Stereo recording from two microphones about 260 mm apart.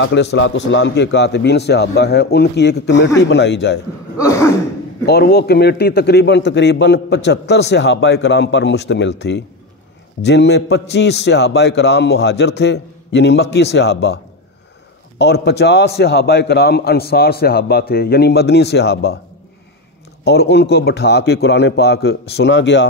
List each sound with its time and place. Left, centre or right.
0.0 s a man's voice: left
4.2 s throat clearing: centre
5.0 s a man's voice: left
10.2 s a man's voice: left
20.2 s a man's voice: left